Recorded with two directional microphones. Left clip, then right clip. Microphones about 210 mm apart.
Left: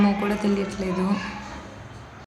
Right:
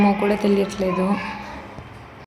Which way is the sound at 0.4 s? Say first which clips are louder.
Right 6 dB; 15° right (ahead or behind).